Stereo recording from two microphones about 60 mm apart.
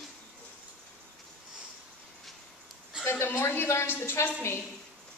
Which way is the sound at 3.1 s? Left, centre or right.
Left.